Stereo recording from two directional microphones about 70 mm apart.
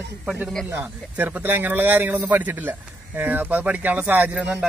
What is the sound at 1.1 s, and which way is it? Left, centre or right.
Speech, right.